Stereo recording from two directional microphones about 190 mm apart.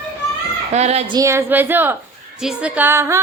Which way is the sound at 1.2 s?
15° right (ahead or behind).